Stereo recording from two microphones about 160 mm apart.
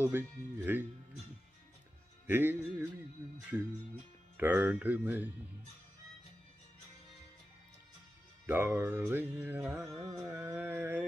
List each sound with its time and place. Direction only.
0.0 s music: 10° right (ahead or behind)
2.2 s music: 15° right (ahead or behind)
4.4 s music: 10° right (ahead or behind)
8.5 s music: 10° right (ahead or behind)